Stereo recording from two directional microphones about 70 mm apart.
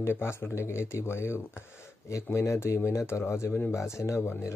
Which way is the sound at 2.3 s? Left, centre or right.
Left.